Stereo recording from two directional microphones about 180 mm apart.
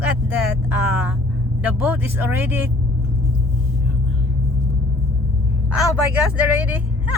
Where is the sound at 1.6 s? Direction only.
10° right (ahead or behind).